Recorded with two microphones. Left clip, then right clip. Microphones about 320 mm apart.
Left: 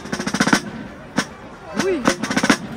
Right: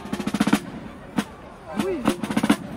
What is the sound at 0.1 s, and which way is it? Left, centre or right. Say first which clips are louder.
Percussion: left 6 dB; left.